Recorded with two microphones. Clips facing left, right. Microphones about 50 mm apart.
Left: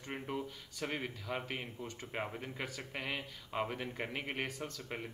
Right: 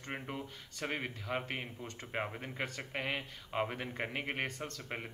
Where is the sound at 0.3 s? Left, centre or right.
Centre.